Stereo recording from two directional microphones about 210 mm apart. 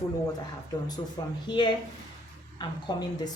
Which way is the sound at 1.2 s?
20° left (ahead or behind).